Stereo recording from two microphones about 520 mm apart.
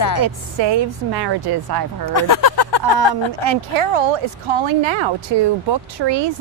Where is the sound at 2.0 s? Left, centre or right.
Left.